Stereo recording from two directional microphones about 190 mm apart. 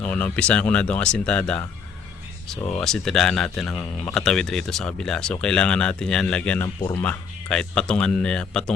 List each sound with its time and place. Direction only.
0.0 s speech: 10° left (ahead or behind)
2.8 s speech: centre (ahead or behind)
6.7 s speech: 30° left (ahead or behind)
7.0 s speech: 5° left (ahead or behind)